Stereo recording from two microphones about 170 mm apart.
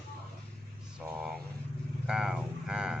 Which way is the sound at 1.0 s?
5° right (ahead or behind).